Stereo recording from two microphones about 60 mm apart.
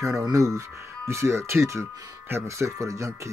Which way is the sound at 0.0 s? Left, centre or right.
Right.